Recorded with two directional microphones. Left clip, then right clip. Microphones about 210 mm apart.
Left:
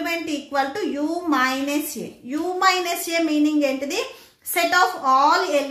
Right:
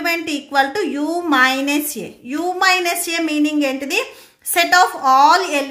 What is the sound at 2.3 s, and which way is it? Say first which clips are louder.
A woman's voice: right 4 dB; 40° right (ahead or behind).